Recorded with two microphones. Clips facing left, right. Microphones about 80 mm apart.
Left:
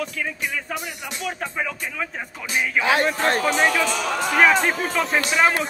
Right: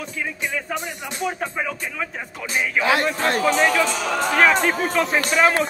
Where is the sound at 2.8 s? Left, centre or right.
Left.